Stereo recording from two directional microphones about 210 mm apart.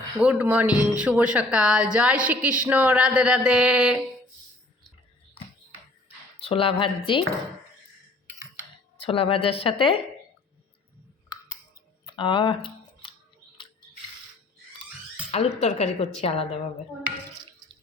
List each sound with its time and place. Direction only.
0.2 s speech: 5° right (ahead or behind)
6.4 s a woman's voice: 25° left (ahead or behind)
9.0 s a woman's voice: 25° left (ahead or behind)
12.0 s a sound: 25° left (ahead or behind)
15.3 s a woman's voice: 30° left (ahead or behind)